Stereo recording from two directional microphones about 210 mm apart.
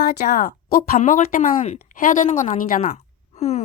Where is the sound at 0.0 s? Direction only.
40° left (ahead or behind).